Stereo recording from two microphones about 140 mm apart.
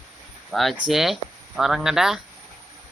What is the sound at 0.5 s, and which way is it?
Speech, centre (ahead or behind).